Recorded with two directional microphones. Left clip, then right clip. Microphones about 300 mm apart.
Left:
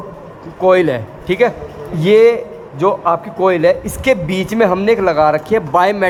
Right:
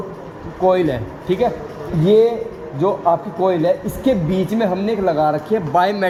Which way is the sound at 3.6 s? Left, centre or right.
Left.